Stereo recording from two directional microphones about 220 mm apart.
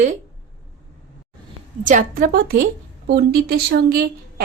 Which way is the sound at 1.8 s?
35° right (ahead or behind).